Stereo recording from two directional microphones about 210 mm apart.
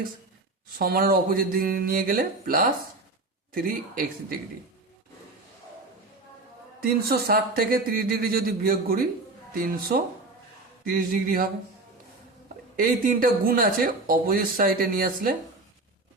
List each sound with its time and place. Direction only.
0.8 s speech: 45° right (ahead or behind)
6.8 s speech: 45° right (ahead or behind)
12.7 s speech: 40° right (ahead or behind)